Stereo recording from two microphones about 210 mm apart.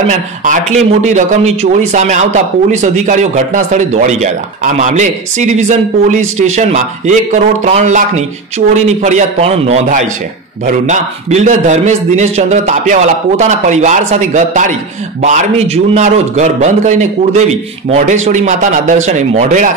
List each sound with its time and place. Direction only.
0.5 s a man's voice: 35° right (ahead or behind)